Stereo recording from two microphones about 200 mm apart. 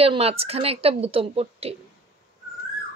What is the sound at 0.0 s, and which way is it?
A woman's voice, 30° right (ahead or behind).